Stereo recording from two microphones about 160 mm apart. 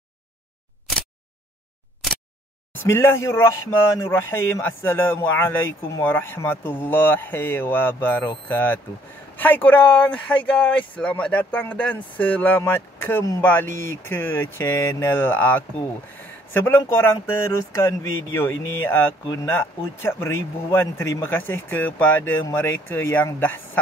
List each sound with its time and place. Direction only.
2.7 s speech: 15° left (ahead or behind)